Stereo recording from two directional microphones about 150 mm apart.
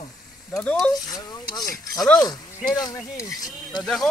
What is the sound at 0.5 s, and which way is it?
Speech, 5° left (ahead or behind).